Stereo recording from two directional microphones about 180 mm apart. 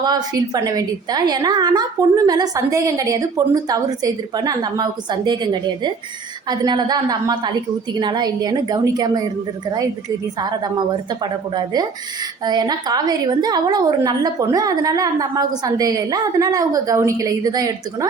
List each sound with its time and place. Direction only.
0.0 s a woman's voice: 20° right (ahead or behind)
10.4 s a woman's voice: 25° right (ahead or behind)